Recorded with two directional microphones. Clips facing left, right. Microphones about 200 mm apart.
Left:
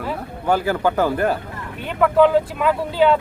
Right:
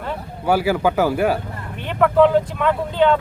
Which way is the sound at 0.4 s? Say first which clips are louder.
Right 1 dB; 10° right (ahead or behind).